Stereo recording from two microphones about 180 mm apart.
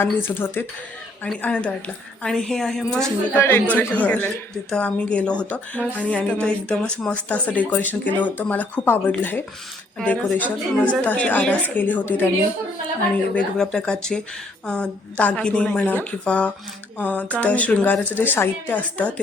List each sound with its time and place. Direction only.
0.0 s a woman's voice: 10° left (ahead or behind)
13.3 s a woman's voice: 5° left (ahead or behind)